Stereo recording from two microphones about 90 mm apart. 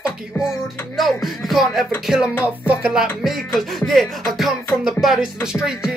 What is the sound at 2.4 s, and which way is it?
Music, 15° right (ahead or behind).